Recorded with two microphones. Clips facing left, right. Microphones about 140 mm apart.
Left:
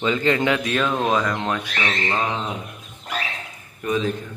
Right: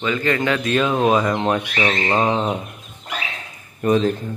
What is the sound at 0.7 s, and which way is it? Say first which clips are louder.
Speech: right 4 dB; 10° right (ahead or behind).